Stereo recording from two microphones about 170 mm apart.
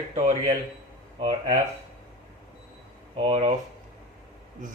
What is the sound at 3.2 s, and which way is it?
Speech, 35° right (ahead or behind).